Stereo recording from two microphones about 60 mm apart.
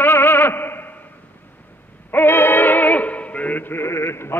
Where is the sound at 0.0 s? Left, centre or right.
Left.